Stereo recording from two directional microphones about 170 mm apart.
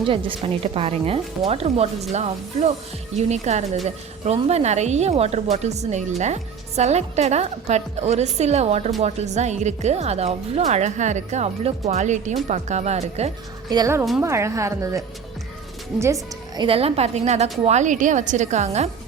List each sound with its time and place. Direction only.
0.0 s a woman's voice: 30° right (ahead or behind)
13.7 s a woman's voice: 20° right (ahead or behind)
16.6 s a woman's voice: 35° right (ahead or behind)